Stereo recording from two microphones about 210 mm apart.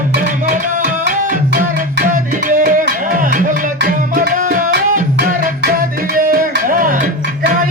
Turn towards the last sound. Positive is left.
turn(degrees=-40)  # may be behind; listen again after turning